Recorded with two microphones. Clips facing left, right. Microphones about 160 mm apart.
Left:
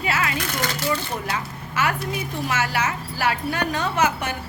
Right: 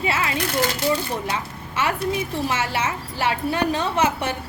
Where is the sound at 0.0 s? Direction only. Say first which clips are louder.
Right 1 dB; 25° right (ahead or behind).